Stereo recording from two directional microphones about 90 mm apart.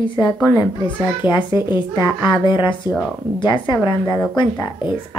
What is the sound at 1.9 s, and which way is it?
A woman's voice, 55° left (ahead or behind).